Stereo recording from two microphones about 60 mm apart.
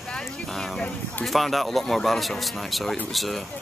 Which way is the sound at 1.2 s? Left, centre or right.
Centre.